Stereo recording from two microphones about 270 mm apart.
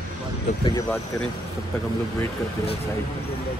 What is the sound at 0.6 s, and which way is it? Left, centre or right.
Speech, centre.